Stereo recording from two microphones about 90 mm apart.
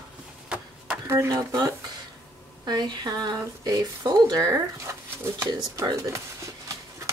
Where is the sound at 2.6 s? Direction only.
50° right (ahead or behind); by 5.9 s 35° right (ahead or behind).